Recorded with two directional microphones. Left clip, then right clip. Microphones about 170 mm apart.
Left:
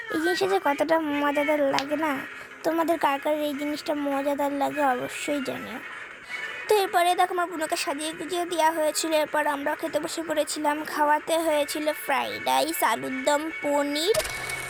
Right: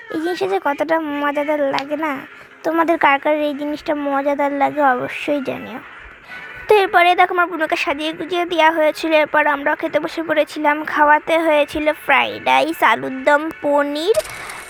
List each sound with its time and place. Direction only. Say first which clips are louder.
0.2 s a woman's voice: right 4 dB; 20° right (ahead or behind)
6.7 s a woman's voice: right 9 dB; 25° right (ahead or behind)
12.2 s speech: right 9 dB; 55° right (ahead or behind)
12.8 s a woman's voice: right 9 dB; 25° right (ahead or behind)